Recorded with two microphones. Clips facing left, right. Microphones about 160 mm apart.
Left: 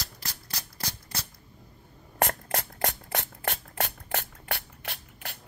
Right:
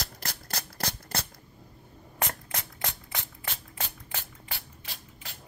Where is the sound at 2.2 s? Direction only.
55° left (ahead or behind).